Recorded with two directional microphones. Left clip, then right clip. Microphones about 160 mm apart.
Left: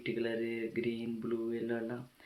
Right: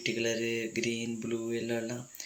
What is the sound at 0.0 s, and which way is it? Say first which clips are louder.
Speech: right 4 dB; 40° right (ahead or behind).